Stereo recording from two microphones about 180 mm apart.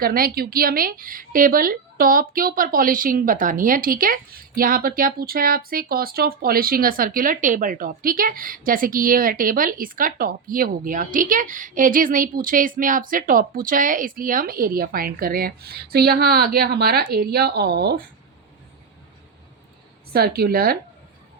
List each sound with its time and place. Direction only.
0.0 s a woman's voice: 55° right (ahead or behind)
20.1 s speech: 55° right (ahead or behind)